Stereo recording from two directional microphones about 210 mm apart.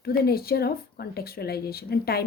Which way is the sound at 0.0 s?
45° left (ahead or behind).